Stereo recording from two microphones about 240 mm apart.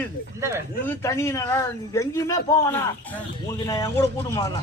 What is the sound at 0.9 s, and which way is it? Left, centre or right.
A man's voice, centre.